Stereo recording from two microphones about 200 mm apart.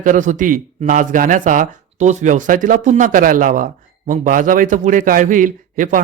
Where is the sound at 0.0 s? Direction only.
40° right (ahead or behind).